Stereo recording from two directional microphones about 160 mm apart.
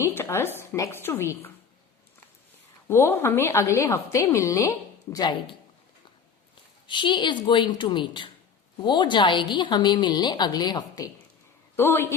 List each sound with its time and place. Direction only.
0.0 s a woman's voice: 15° left (ahead or behind)
2.8 s a woman's voice: 15° left (ahead or behind)
6.8 s a woman's voice: 30° left (ahead or behind)